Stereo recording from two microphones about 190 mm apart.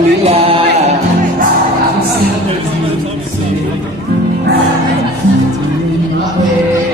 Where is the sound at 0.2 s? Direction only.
30° right (ahead or behind).